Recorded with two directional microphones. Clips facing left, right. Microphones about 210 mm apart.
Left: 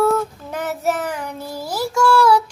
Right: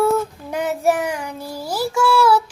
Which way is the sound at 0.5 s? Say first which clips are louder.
Right 3 dB; 15° right (ahead or behind).